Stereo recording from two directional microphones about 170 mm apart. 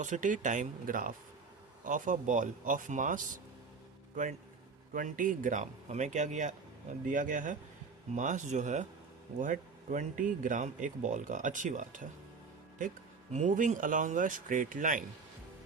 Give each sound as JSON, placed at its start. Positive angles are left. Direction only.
{"t": 0.0, "sound": "a man's voice", "side_deg": -50}
{"t": 13.3, "sound": "speech", "side_deg": -45}